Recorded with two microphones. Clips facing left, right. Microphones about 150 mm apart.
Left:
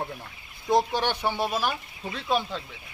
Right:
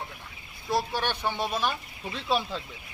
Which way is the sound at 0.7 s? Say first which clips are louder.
Left 5 dB; 20° left (ahead or behind).